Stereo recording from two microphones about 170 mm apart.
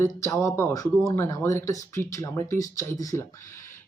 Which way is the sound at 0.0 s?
15° left (ahead or behind).